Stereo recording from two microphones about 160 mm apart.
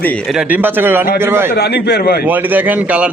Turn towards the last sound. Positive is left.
turn(degrees=-10)  # may be behind; listen again after turning